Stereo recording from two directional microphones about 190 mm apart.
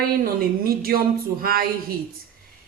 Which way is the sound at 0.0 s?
50° right (ahead or behind).